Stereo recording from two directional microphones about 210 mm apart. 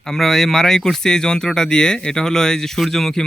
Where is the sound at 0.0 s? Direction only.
Centre (ahead or behind).